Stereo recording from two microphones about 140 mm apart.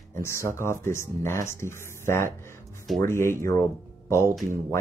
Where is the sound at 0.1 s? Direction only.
20° left (ahead or behind).